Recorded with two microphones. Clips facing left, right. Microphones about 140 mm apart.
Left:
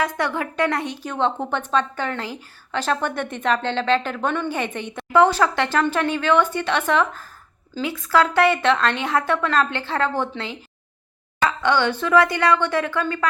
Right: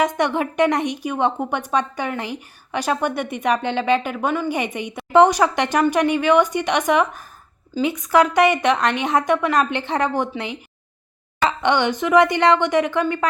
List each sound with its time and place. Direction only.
0.0 s a woman's voice: 20° right (ahead or behind)